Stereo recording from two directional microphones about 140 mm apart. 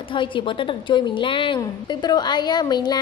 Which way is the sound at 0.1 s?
35° left (ahead or behind).